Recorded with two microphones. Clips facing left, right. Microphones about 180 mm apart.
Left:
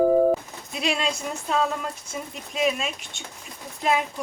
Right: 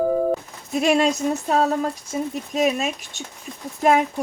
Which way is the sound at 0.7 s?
45° right (ahead or behind).